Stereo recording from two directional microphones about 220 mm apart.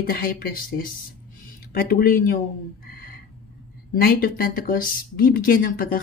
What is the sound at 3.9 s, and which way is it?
Speech, 40° left (ahead or behind).